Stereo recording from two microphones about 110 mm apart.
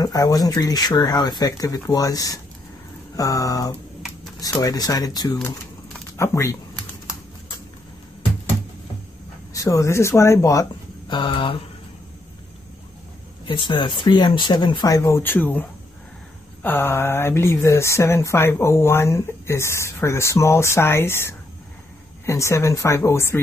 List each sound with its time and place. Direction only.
0.0 s speech: 35° left (ahead or behind)
9.5 s speech: 30° left (ahead or behind)
11.1 s speech: 50° left (ahead or behind)
13.5 s speech: 45° left (ahead or behind); by 15.6 s 15° left (ahead or behind)
16.6 s speech: 20° left (ahead or behind)